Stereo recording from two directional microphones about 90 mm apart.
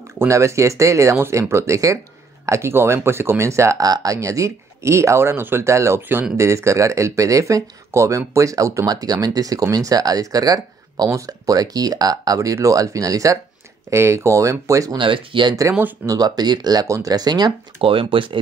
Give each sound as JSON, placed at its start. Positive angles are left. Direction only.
{"t": 0.3, "sound": "speech", "side_deg": -35}
{"t": 15.0, "sound": "speech", "side_deg": -70}
{"t": 16.1, "sound": "speech", "side_deg": -45}
{"t": 16.8, "sound": "speech", "side_deg": -40}
{"t": 17.8, "sound": "speech", "side_deg": -75}